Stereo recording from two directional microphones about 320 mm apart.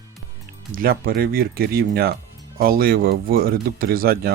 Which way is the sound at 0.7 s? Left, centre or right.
Right.